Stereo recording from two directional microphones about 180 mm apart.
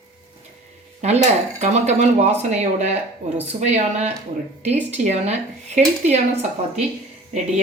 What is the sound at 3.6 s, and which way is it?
A woman's voice, 40° right (ahead or behind).